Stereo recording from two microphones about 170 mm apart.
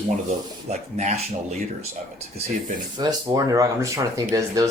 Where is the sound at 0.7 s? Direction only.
40° right (ahead or behind).